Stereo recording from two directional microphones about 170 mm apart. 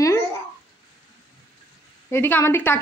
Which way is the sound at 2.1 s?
15° left (ahead or behind).